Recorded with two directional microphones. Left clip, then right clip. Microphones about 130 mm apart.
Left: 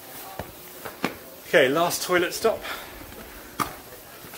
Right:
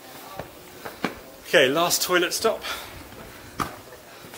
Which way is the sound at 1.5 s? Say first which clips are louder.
Right 1 dB; 15° left (ahead or behind).